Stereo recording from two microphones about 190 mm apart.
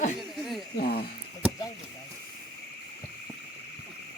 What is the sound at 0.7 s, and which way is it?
Speech, 55° left (ahead or behind).